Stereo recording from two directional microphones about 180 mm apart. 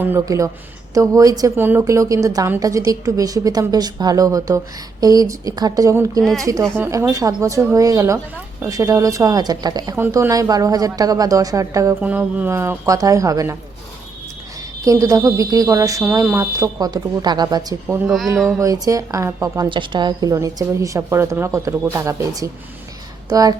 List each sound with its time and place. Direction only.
0.0 s a woman's voice: 15° right (ahead or behind)
14.8 s a woman's voice: 20° right (ahead or behind)
18.0 s speech: centre (ahead or behind)
18.6 s a woman's voice: 20° right (ahead or behind)